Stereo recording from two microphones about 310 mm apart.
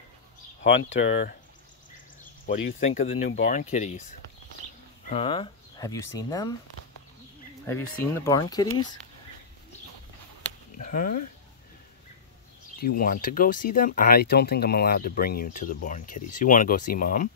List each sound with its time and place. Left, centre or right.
2.4 s speech: left
5.1 s speech: centre
7.6 s speech: centre
10.8 s speech: left
12.7 s speech: left